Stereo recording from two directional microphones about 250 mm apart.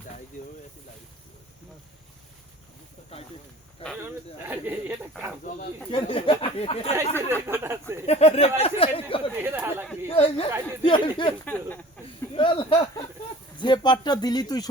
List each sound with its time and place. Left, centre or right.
4.4 s speech: centre
5.9 s speech: centre
7.4 s speech: centre
8.0 s a sound: left
9.3 s chatter: centre
10.1 s chatter: left
10.8 s speech: centre
11.4 s speech: centre
12.3 s a sound: left
13.6 s speech: centre